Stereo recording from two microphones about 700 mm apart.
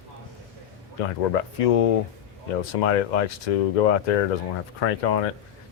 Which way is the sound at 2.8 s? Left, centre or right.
Left.